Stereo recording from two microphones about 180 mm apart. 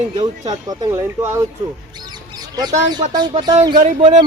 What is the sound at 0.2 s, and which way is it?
Speech, 20° right (ahead or behind).